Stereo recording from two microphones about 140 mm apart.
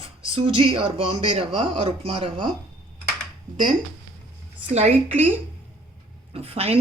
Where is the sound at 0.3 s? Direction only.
40° right (ahead or behind).